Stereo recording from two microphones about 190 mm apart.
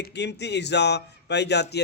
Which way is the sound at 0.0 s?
65° left (ahead or behind).